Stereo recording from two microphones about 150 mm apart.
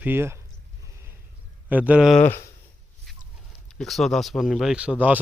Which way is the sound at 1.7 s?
10° right (ahead or behind).